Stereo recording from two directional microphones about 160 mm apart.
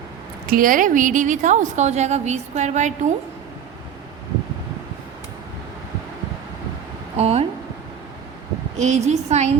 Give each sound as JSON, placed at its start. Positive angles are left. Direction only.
{"t": 0.4, "sound": "a woman's voice", "side_deg": -60}
{"t": 7.2, "sound": "speech", "side_deg": -40}
{"t": 8.8, "sound": "a woman's voice", "side_deg": -45}